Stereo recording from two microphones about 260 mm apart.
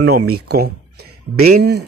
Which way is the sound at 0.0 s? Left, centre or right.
Right.